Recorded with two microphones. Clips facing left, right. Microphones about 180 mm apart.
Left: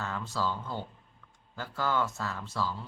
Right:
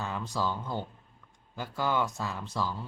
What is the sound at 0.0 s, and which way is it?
Speech, 15° right (ahead or behind).